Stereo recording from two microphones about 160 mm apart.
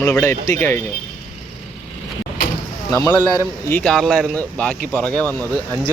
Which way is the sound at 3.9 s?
Centre (ahead or behind).